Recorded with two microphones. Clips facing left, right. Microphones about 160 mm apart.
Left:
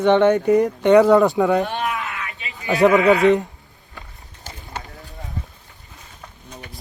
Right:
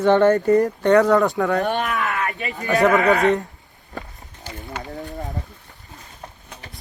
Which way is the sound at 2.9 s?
45° right (ahead or behind).